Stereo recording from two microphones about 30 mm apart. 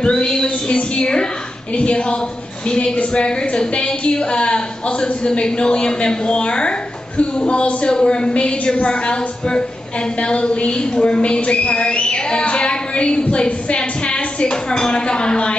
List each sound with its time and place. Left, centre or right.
0.0 s a woman's voice: left